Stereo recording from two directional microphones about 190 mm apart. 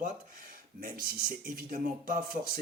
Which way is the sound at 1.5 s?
50° right (ahead or behind).